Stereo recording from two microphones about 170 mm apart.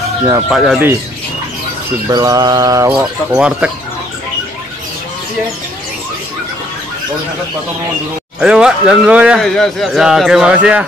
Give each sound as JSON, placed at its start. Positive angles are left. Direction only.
{"t": 0.3, "sound": "speech", "side_deg": 0}
{"t": 2.0, "sound": "mantra", "side_deg": -20}
{"t": 3.3, "sound": "speech", "side_deg": -5}
{"t": 8.4, "sound": "speech", "side_deg": -5}